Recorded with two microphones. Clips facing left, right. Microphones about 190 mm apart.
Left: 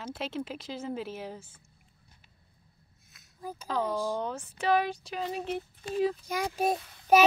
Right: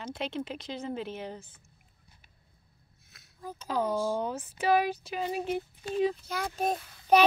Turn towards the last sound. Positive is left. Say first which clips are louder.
# left 1 dB
turn(degrees=5)  # may be behind; listen again after turning